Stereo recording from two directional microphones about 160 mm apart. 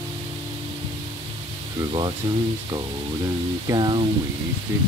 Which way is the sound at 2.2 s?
30° right (ahead or behind).